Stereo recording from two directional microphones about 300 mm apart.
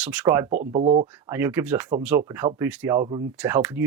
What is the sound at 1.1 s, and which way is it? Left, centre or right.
Speech, centre.